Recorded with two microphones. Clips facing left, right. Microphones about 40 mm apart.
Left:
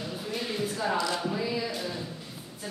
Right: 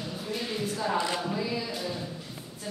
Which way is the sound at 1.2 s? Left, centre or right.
Centre.